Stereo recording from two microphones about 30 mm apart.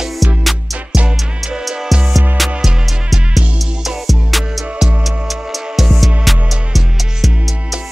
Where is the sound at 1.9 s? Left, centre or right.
Centre.